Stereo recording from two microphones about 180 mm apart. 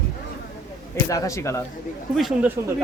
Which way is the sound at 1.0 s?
20° left (ahead or behind).